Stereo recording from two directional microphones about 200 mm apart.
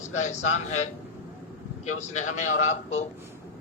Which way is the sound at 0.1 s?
35° left (ahead or behind).